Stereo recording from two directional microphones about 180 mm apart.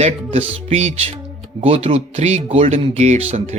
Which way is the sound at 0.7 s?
35° right (ahead or behind).